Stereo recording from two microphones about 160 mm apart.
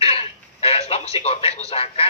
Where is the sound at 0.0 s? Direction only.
35° left (ahead or behind).